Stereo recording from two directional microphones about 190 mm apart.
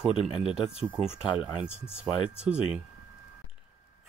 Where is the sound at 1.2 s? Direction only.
5° right (ahead or behind).